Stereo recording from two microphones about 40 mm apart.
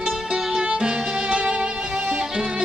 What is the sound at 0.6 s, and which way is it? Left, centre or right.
Music, right.